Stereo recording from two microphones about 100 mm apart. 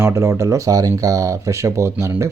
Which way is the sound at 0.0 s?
25° right (ahead or behind).